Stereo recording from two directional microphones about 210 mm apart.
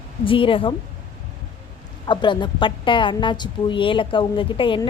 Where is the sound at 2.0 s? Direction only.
20° left (ahead or behind).